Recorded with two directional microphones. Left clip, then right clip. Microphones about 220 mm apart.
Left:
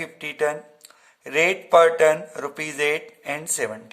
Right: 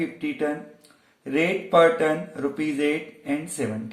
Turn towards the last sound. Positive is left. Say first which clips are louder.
# left 1 dB
turn(degrees=40)  # may be behind; listen again after turning